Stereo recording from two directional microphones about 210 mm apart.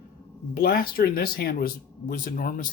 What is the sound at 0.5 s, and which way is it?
Speech, 45° left (ahead or behind).